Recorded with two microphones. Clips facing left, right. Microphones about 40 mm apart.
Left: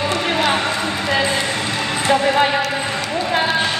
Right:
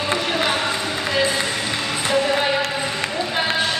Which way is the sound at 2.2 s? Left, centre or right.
Left.